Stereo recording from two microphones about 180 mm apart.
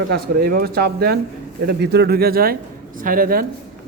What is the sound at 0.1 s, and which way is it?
A man's voice, 55° right (ahead or behind).